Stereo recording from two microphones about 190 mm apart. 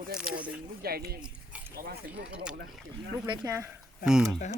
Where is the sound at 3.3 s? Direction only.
15° right (ahead or behind).